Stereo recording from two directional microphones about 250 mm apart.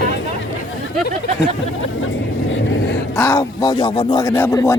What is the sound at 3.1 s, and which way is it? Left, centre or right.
Speech, centre.